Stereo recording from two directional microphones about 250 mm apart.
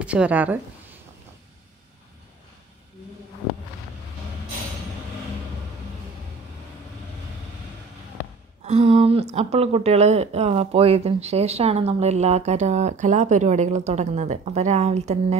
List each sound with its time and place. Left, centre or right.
0.0 s a woman's voice: centre
8.6 s a woman's voice: right